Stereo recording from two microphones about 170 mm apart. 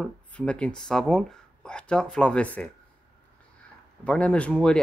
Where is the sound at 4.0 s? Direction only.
5° left (ahead or behind).